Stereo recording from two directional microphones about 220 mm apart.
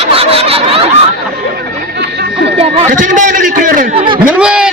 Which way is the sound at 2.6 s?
25° right (ahead or behind).